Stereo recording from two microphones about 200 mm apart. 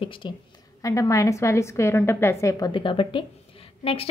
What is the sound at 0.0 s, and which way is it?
A woman's voice, 25° left (ahead or behind).